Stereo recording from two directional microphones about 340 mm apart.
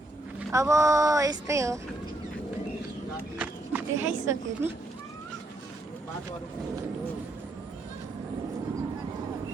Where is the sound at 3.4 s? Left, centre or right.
Centre.